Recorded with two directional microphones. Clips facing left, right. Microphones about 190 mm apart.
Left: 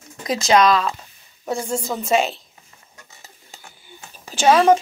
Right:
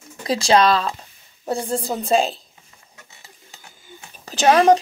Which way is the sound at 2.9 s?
45° left (ahead or behind).